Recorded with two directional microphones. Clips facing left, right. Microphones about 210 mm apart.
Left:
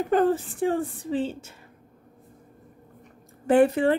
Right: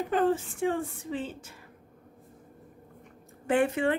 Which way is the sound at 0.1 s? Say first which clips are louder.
Left 4 dB; 40° left (ahead or behind).